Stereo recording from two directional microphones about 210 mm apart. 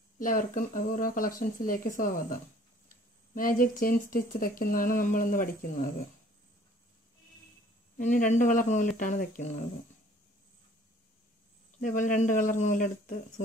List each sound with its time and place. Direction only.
0.2 s speech: 40° left (ahead or behind)
8.0 s speech: 40° left (ahead or behind)
11.8 s speech: 40° left (ahead or behind)